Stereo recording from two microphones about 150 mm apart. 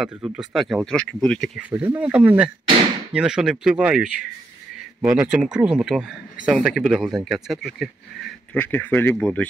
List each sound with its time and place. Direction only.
0.0 s speech: 5° right (ahead or behind)
1.6 s speech: 15° right (ahead or behind)
8.5 s speech: 10° left (ahead or behind)